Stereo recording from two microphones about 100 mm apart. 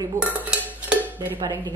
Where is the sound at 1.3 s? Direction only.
45° right (ahead or behind).